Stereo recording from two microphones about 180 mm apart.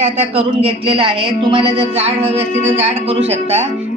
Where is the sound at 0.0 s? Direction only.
35° right (ahead or behind).